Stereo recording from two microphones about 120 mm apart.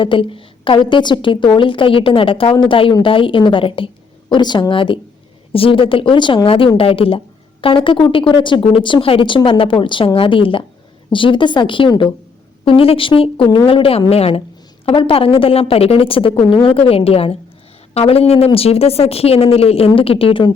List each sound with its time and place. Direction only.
0.0 s a woman's voice: 45° left (ahead or behind)